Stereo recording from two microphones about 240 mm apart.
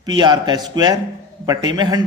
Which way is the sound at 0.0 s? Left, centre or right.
Centre.